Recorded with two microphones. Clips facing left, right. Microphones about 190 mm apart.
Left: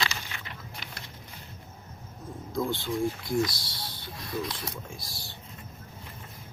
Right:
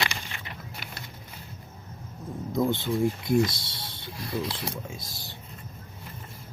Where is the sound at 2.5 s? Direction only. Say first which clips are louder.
Right 4 dB; 20° right (ahead or behind).